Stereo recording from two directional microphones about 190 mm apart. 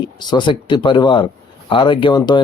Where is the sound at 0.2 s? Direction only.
25° left (ahead or behind).